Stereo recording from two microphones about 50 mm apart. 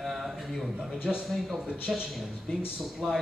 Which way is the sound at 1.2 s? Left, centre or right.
Centre.